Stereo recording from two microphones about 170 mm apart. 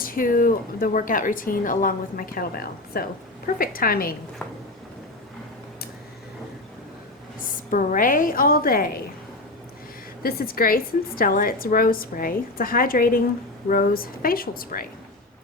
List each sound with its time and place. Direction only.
0.0 s speech: 55° left (ahead or behind)
7.7 s speech: 50° left (ahead or behind)
10.2 s speech: 60° left (ahead or behind)